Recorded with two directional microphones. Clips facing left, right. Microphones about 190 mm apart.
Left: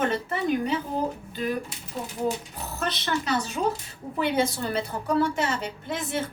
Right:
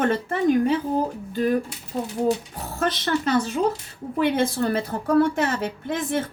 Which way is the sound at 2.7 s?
50° right (ahead or behind).